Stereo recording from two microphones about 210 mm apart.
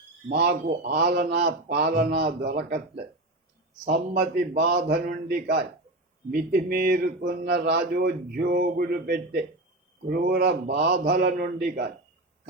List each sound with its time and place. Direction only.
0.3 s speech: 45° right (ahead or behind)
3.8 s speech: 50° right (ahead or behind)
11.0 s speech: 40° right (ahead or behind)